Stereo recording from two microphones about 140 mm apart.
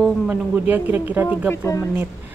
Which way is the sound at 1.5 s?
20° left (ahead or behind).